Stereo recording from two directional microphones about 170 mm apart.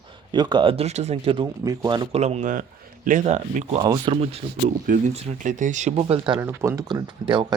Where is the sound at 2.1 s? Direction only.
40° right (ahead or behind).